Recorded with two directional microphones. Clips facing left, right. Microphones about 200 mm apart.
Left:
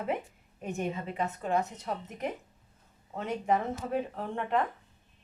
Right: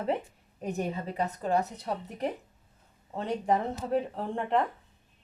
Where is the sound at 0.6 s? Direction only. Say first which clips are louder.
Right 2 dB; 35° right (ahead or behind).